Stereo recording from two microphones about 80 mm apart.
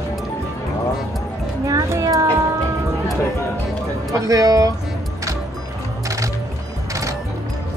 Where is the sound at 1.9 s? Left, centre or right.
Right.